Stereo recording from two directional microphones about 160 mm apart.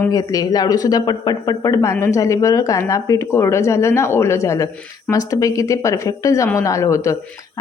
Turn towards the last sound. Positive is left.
turn(degrees=20)  # may be behind; listen again after turning